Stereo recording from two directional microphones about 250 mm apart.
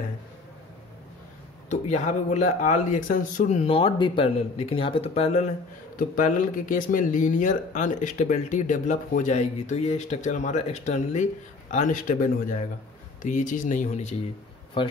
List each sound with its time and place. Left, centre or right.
1.7 s speech: left